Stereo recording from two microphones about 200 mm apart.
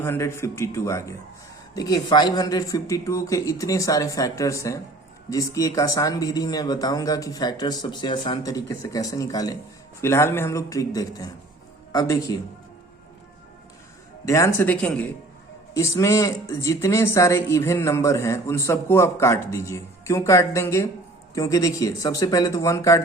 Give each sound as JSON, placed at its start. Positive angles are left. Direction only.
{"t": 0.0, "sound": "speech", "side_deg": 10}
{"t": 14.3, "sound": "speech", "side_deg": 15}